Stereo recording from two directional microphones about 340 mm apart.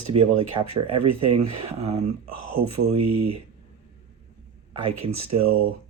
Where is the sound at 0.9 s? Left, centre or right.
Right.